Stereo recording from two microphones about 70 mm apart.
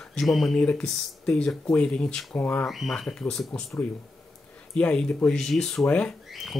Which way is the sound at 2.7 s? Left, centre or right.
Centre.